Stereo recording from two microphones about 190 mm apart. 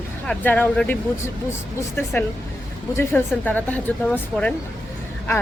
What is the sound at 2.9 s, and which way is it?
Speech, 10° left (ahead or behind).